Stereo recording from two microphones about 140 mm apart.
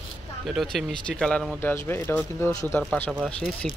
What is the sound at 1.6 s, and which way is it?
Speech, 15° left (ahead or behind).